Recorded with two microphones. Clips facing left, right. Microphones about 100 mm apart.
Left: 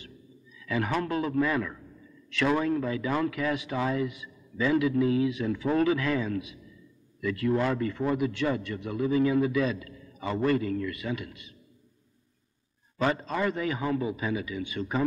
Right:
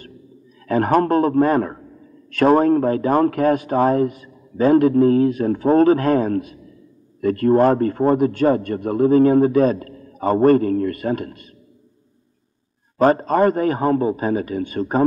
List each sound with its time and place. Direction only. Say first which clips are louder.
0.7 s a man's voice: right 12 dB; 45° right (ahead or behind)
12.9 s a man's voice: right 12 dB; 45° right (ahead or behind)